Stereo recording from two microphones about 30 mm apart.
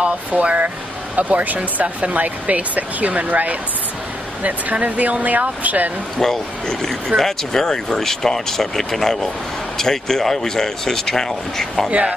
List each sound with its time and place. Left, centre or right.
0.3 s speech: right
1.1 s speech: right
4.4 s speech: right
6.1 s speech: centre
11.9 s speech: right